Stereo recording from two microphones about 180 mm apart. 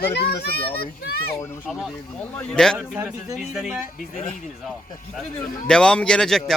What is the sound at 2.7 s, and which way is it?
A man's voice, 10° right (ahead or behind).